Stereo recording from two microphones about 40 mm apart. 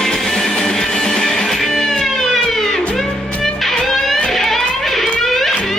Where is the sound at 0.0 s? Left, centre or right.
Centre.